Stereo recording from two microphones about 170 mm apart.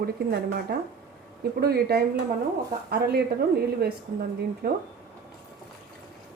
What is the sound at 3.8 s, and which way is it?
Speech, 65° right (ahead or behind).